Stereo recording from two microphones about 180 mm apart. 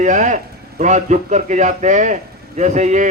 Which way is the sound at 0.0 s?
45° right (ahead or behind).